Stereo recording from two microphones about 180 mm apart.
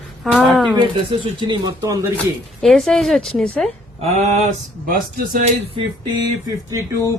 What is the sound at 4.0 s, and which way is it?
Speech, 40° right (ahead or behind).